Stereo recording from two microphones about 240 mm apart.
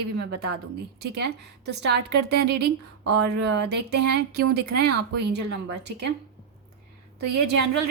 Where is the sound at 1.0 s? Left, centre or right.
Right.